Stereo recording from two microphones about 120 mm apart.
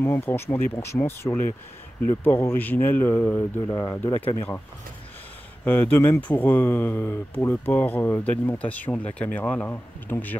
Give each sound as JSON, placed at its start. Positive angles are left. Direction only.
{"t": 0.0, "sound": "speech", "side_deg": 20}
{"t": 4.1, "sound": "speech", "side_deg": 50}
{"t": 5.7, "sound": "speech", "side_deg": 15}